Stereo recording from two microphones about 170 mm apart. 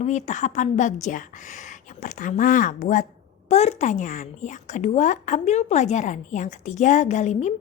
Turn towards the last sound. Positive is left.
turn(degrees=45)  # may be behind; listen again after turning